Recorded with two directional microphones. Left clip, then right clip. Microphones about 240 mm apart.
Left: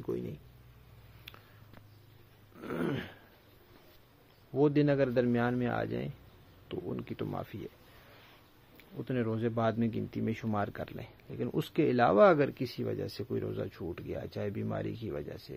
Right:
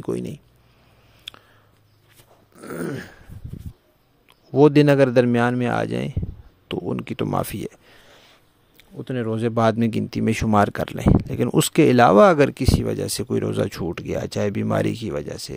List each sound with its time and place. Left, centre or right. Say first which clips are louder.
0.0 s speech: right 10 dB; right
1.3 s a sound: right 13 dB; right
2.5 s dog: right 6 dB; centre
4.5 s speech: right 13 dB; right
8.7 s speech: right 7 dB; right